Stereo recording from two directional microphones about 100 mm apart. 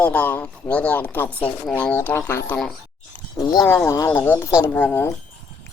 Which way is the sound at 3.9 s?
35° left (ahead or behind).